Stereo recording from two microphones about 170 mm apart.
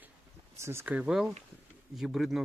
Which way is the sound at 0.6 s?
15° right (ahead or behind).